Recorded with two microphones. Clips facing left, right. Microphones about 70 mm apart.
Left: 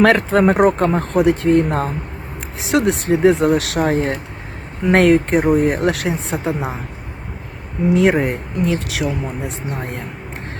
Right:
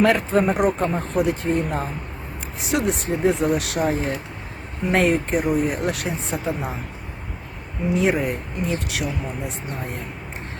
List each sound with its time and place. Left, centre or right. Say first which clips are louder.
0.0 s speech: left 5 dB; left
2.6 s speech: left 6 dB; left
4.9 s speech: left 7 dB; left
5.4 s speech: left 6 dB; left
5.8 s speech: left 6 dB; left
7.9 s speech: left 5 dB; left